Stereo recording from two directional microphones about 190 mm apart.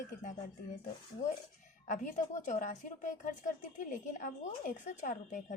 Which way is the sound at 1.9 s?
40° left (ahead or behind).